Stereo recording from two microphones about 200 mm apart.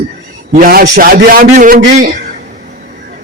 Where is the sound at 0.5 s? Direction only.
45° right (ahead or behind).